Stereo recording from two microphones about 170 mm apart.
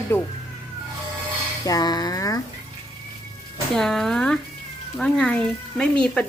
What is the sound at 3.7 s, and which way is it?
Speech, centre (ahead or behind).